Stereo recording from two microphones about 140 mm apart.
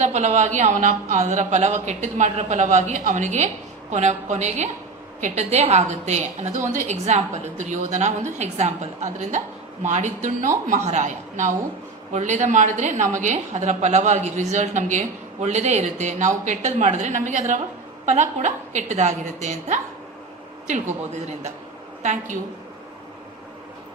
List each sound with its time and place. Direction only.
0.0 s a woman's voice: 55° right (ahead or behind)
22.0 s a woman's voice: 60° right (ahead or behind)